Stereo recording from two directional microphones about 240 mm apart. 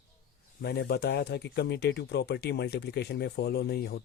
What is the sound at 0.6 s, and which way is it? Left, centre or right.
Speech, left.